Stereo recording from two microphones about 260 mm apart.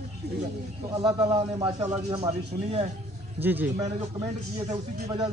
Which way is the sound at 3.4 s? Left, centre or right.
Centre.